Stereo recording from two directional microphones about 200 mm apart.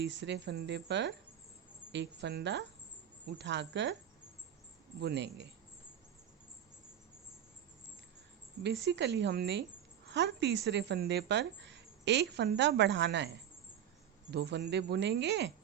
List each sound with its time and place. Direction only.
0.0 s speech: 60° right (ahead or behind)
4.9 s speech: 60° right (ahead or behind)
8.6 s speech: 60° right (ahead or behind)